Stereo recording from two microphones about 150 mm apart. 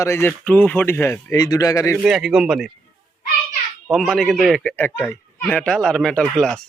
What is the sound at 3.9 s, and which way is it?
Speech, centre (ahead or behind).